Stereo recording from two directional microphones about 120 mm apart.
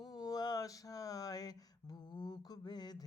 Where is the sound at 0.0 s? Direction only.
35° left (ahead or behind).